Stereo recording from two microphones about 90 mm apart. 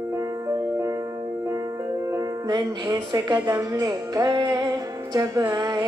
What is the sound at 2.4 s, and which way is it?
Music, 55° right (ahead or behind).